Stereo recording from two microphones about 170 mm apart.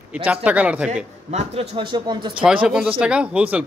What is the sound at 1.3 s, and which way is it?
Speech, 35° right (ahead or behind).